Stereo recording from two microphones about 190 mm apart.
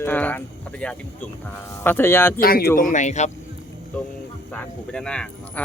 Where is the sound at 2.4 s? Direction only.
50° left (ahead or behind).